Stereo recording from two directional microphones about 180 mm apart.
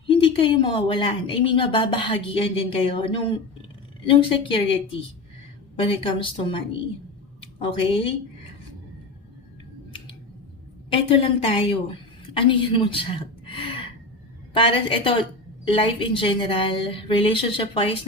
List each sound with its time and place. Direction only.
0.1 s speech: 30° left (ahead or behind)
7.6 s speech: 30° left (ahead or behind)
10.8 s a woman's voice: 30° left (ahead or behind)